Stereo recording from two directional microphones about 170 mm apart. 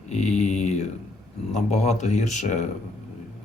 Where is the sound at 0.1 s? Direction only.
40° left (ahead or behind).